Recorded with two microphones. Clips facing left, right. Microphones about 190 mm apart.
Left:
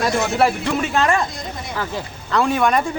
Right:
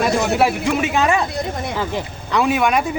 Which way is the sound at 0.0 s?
10° right (ahead or behind).